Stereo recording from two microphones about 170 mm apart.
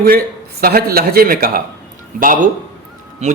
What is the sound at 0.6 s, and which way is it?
Speech, 60° right (ahead or behind).